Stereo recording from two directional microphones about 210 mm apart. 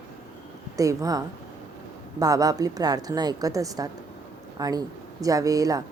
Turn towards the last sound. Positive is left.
turn(degrees=-15)  # may be behind; listen again after turning